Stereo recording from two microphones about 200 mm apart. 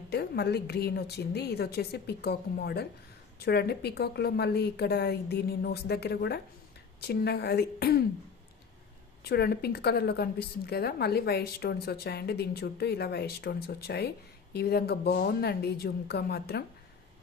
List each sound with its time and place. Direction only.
0.1 s a woman's voice: 55° left (ahead or behind)
9.2 s a woman's voice: 55° left (ahead or behind)